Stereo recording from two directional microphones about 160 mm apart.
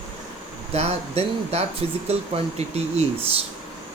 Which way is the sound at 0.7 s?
40° right (ahead or behind).